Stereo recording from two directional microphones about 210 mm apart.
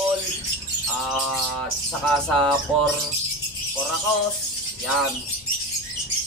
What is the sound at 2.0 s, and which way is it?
Music, 5° left (ahead or behind).